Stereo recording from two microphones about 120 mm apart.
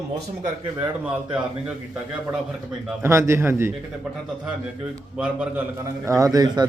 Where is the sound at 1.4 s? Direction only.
10° right (ahead or behind).